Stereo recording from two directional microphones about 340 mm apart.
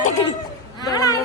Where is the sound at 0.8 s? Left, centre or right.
Centre.